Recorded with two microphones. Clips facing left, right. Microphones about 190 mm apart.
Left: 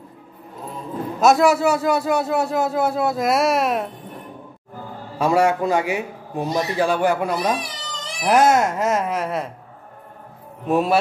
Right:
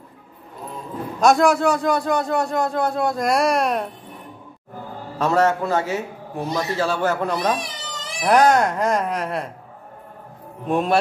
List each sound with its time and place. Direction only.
1.2 s a man's voice: 5° left (ahead or behind)
5.2 s a man's voice: 10° left (ahead or behind)
10.7 s a man's voice: 5° left (ahead or behind)